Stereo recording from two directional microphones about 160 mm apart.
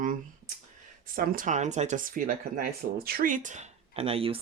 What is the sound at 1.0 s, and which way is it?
Speech, 60° right (ahead or behind).